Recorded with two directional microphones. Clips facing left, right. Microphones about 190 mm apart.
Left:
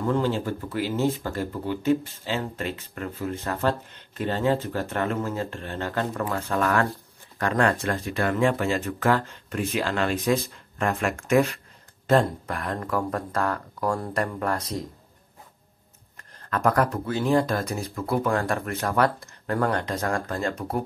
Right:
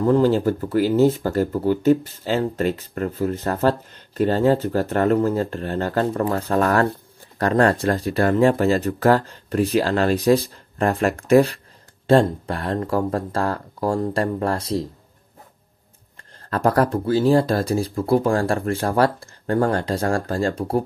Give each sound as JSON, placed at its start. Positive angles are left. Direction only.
{"t": 0.0, "sound": "speech", "side_deg": -40}
{"t": 16.4, "sound": "speech", "side_deg": -30}